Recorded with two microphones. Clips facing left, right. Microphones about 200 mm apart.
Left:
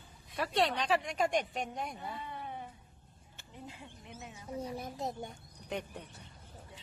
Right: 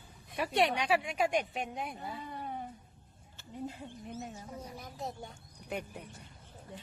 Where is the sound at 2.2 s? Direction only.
40° right (ahead or behind).